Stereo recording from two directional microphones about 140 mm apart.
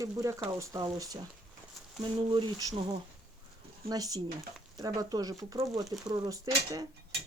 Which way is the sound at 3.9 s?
25° right (ahead or behind).